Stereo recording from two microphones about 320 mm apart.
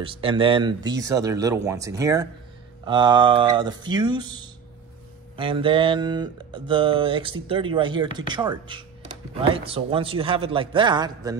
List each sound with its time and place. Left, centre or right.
0.0 s speech: centre